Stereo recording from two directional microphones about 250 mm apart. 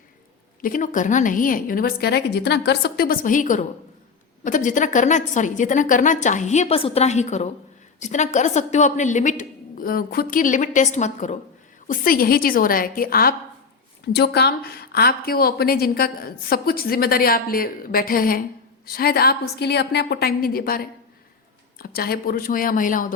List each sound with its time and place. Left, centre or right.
0.6 s a woman's voice: left